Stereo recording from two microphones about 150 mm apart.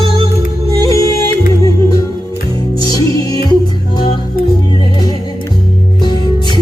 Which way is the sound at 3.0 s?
25° left (ahead or behind).